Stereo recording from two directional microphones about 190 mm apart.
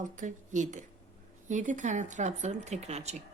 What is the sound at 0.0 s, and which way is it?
Speech, 40° right (ahead or behind).